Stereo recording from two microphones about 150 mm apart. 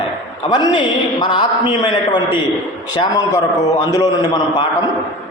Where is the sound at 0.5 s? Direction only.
30° left (ahead or behind).